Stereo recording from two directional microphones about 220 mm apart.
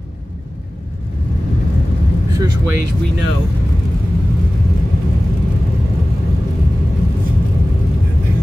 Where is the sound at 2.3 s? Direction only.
15° right (ahead or behind).